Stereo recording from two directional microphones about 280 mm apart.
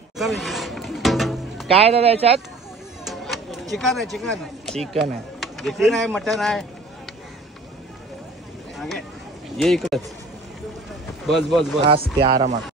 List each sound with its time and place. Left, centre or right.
0.2 s music: centre
1.7 s speech: right
3.1 s a sound: centre
3.7 s speech: centre
8.7 s a sound: centre
9.6 s speech: centre
11.2 s speech: centre
11.9 s speech: centre